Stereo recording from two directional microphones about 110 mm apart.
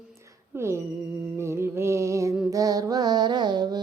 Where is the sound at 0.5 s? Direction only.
25° right (ahead or behind).